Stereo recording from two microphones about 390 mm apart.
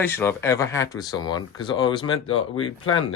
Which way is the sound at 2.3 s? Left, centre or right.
Left.